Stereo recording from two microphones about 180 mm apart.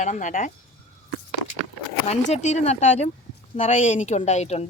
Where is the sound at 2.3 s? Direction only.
40° left (ahead or behind).